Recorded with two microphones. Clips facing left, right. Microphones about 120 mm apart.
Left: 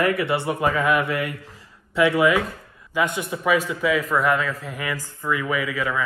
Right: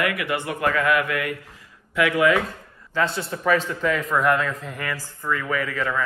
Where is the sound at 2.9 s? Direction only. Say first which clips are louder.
Left 1 dB; 15° left (ahead or behind).